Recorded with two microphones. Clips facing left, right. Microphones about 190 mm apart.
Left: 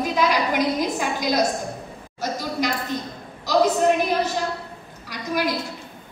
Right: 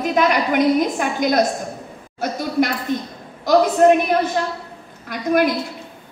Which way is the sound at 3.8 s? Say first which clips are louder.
Right 10 dB; 60° right (ahead or behind).